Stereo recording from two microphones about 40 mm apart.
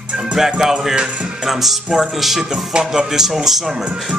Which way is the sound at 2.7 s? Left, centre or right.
Centre.